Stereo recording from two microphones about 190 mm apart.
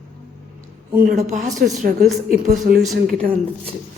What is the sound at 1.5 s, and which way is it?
Speech, centre (ahead or behind).